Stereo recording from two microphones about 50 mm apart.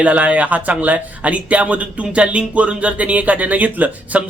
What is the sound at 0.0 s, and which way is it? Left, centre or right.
Speech, right.